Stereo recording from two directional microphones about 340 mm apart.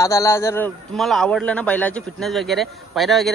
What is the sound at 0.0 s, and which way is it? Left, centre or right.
A man's voice, centre.